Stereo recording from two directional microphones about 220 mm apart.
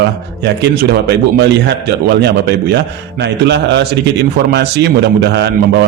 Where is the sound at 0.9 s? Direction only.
45° right (ahead or behind).